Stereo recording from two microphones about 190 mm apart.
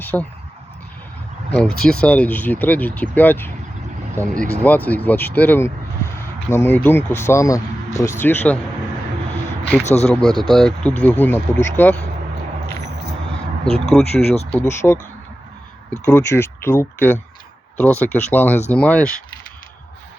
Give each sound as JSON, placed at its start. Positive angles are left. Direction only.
{"t": 0.0, "sound": "speech", "side_deg": 10}
{"t": 1.5, "sound": "speech", "side_deg": 5}
{"t": 4.2, "sound": "speech", "side_deg": -15}
{"t": 4.6, "sound": "speech", "side_deg": 10}
{"t": 9.8, "sound": "speech", "side_deg": 35}
{"t": 10.2, "sound": "speech", "side_deg": 0}
{"t": 13.7, "sound": "speech", "side_deg": 30}
{"t": 14.8, "sound": "speech", "side_deg": 10}
{"t": 16.0, "sound": "speech", "side_deg": 15}